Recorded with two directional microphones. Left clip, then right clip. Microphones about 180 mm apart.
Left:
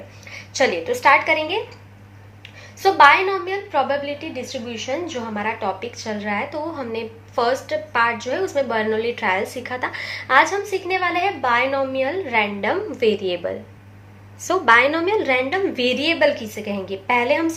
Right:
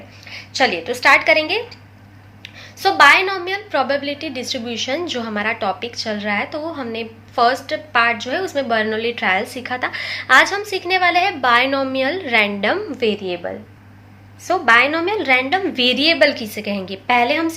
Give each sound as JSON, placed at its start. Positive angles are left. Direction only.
{"t": 0.3, "sound": "a woman's voice", "side_deg": -20}
{"t": 12.9, "sound": "a woman's voice", "side_deg": -20}